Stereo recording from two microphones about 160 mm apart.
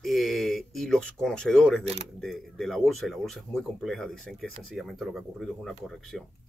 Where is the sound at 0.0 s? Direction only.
Centre (ahead or behind).